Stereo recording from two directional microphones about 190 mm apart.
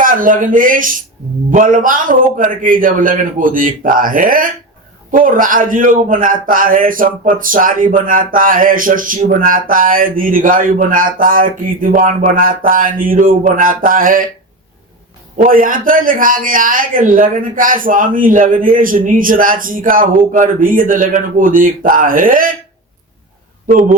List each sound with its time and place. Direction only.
0.0 s a man's voice: 45° right (ahead or behind)
15.4 s a man's voice: 45° right (ahead or behind)